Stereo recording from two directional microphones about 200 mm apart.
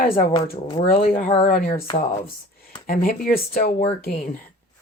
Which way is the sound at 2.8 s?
50° left (ahead or behind).